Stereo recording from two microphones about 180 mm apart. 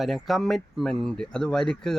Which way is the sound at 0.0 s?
Centre (ahead or behind).